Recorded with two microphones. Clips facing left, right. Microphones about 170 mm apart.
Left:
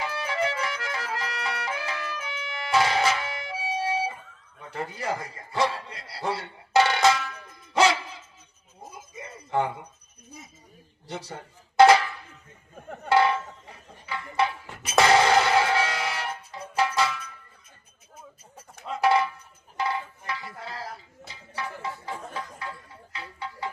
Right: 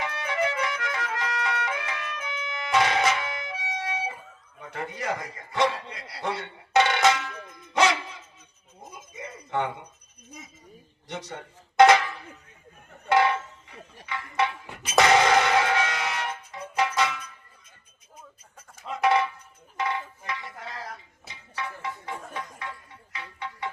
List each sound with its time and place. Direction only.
0.0 s music: 30° left (ahead or behind)
4.7 s a man's voice: 30° left (ahead or behind)
5.9 s music: 30° left (ahead or behind)
8.8 s a sound: 30° left (ahead or behind)
11.1 s music: 30° left (ahead or behind)
13.1 s a sound: 30° left (ahead or behind)
14.1 s music: 30° left (ahead or behind)
18.9 s a sound: 30° left (ahead or behind)
21.5 s music: 30° left (ahead or behind)